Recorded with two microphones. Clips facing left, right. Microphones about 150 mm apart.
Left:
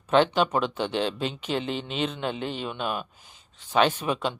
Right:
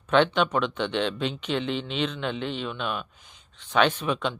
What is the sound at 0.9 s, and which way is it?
Speech, 40° left (ahead or behind).